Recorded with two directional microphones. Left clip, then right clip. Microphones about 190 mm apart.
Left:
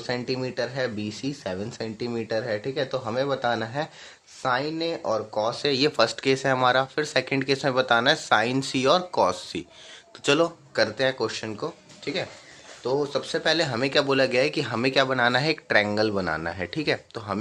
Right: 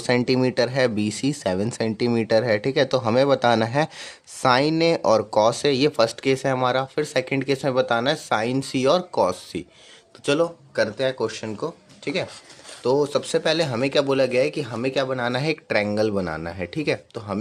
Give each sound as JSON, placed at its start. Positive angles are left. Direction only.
{"t": 0.0, "sound": "speech", "side_deg": -40}
{"t": 12.8, "sound": "speech", "side_deg": -45}